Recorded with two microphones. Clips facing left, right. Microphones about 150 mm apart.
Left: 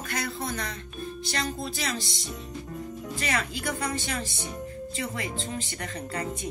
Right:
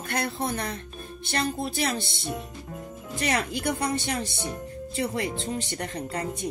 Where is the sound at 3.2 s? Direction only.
60° right (ahead or behind).